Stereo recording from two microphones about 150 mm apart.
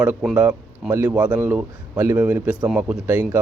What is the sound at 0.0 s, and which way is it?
Speech, 5° right (ahead or behind).